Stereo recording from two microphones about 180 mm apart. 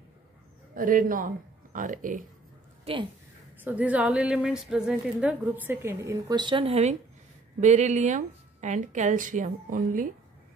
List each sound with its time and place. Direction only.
0.7 s speech: 50° right (ahead or behind)
2.8 s a woman's voice: 30° right (ahead or behind)
3.6 s a woman's voice: 10° right (ahead or behind); by 10.0 s 50° right (ahead or behind)